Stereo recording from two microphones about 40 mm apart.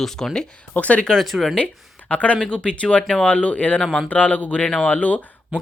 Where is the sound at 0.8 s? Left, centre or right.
Left.